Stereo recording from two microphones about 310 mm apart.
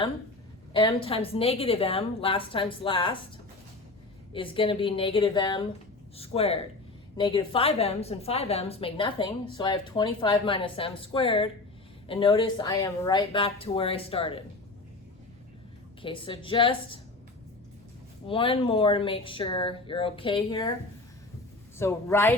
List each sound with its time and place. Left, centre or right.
0.7 s a woman's voice: centre
4.4 s a woman's voice: centre
16.0 s a woman's voice: centre
18.3 s a woman's voice: centre
21.8 s a woman's voice: centre